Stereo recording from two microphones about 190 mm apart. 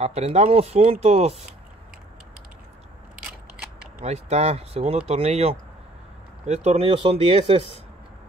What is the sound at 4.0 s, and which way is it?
Speech, 35° right (ahead or behind).